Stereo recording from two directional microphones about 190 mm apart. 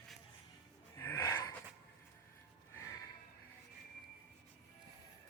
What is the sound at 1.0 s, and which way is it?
Gasp, 15° left (ahead or behind).